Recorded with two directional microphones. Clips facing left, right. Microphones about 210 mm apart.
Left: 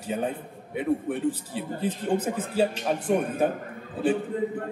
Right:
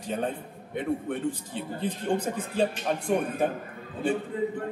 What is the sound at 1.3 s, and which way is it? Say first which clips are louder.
A man's voice: left 3 dB; 5° left (ahead or behind).